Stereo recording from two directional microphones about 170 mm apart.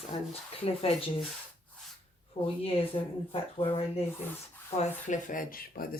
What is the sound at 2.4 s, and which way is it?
Speech, 35° left (ahead or behind).